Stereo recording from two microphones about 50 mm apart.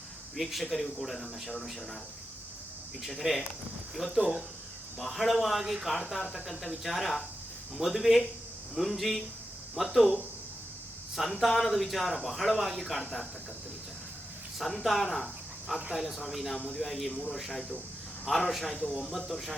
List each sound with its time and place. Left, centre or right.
0.3 s speech: centre
3.1 s speech: centre
11.1 s speech: centre
13.0 s speech: centre
14.6 s speech: centre